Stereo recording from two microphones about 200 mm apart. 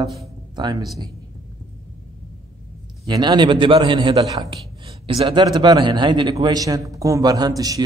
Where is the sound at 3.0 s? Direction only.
20° right (ahead or behind).